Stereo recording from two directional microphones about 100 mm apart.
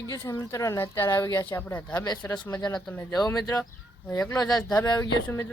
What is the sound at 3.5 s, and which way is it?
Speech, 30° left (ahead or behind).